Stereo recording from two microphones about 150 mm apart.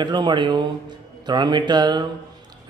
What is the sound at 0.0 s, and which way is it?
Speech, 30° right (ahead or behind).